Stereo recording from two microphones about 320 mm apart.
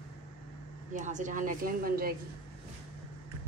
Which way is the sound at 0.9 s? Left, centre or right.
Right.